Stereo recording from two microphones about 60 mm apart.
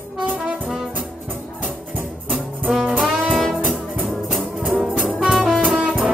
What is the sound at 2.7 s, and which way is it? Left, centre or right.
Music, centre.